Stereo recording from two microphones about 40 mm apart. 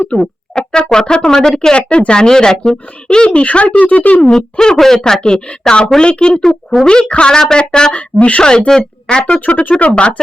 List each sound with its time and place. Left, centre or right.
0.2 s speech: centre
1.7 s a woman's voice: left
3.3 s speech: left
4.2 s a woman's voice: centre
6.3 s speech: centre
6.8 s a woman's voice: left